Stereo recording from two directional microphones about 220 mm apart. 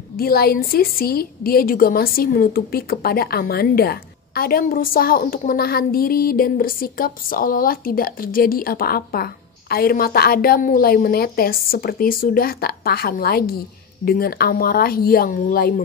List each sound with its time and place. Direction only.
0.2 s a woman's voice: 45° left (ahead or behind)